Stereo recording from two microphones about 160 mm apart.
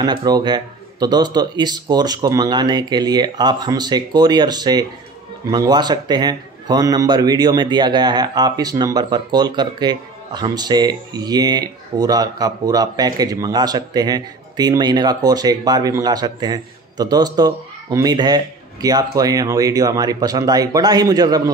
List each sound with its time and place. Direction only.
0.0 s a man's voice: 25° right (ahead or behind)